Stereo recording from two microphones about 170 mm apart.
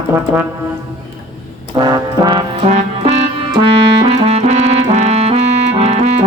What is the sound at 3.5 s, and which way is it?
Music, 30° right (ahead or behind).